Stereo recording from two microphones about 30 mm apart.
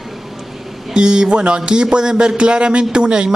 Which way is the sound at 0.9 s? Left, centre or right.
Right.